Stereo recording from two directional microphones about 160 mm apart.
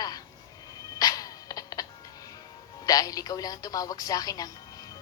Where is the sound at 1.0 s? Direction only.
20° left (ahead or behind).